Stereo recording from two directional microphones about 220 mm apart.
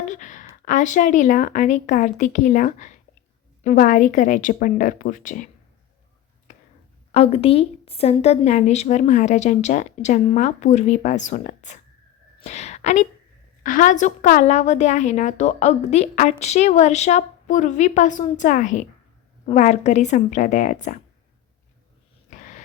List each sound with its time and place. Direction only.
0.1 s a woman's voice: 35° left (ahead or behind)
7.1 s a woman's voice: 25° left (ahead or behind)
22.3 s dog: 35° left (ahead or behind)